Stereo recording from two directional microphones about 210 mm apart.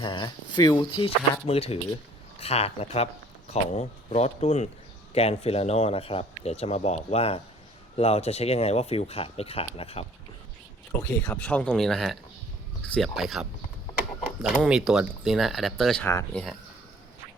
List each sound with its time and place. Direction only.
0.0 s speech: 20° left (ahead or behind)
11.3 s speech: 5° left (ahead or behind)